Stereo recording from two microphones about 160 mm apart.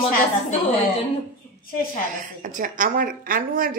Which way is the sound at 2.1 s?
55° right (ahead or behind).